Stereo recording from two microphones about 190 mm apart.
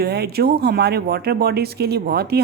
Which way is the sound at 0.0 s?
55° right (ahead or behind).